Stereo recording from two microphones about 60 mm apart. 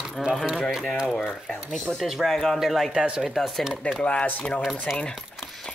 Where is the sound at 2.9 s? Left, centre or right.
Centre.